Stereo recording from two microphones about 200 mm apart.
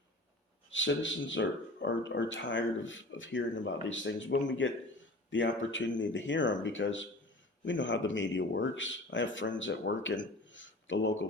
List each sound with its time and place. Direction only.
0.7 s speech: 70° left (ahead or behind)